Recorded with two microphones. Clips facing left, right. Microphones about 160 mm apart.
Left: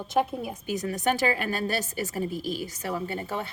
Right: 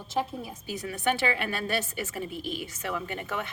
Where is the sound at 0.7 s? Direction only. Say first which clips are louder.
Left 2 dB; 40° left (ahead or behind).